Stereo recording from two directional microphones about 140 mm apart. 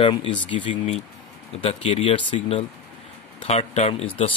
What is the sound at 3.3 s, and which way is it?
Speech, 50° left (ahead or behind).